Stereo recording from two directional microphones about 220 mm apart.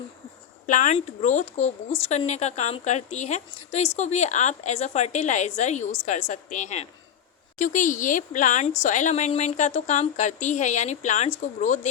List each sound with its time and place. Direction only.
0.7 s a woman's voice: 35° left (ahead or behind)